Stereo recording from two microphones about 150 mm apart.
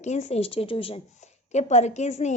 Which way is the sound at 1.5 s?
50° left (ahead or behind).